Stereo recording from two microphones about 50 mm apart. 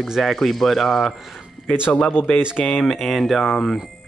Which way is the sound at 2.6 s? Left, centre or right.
Centre.